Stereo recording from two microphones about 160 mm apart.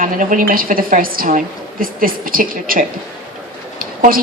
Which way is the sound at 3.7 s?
60° right (ahead or behind).